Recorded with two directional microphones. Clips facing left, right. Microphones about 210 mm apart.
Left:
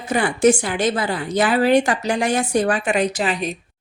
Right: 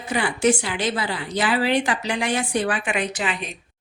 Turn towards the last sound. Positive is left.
turn(degrees=40)  # may be behind; listen again after turning